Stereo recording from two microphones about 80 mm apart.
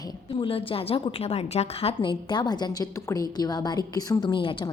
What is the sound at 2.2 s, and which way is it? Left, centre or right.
A woman's voice, left.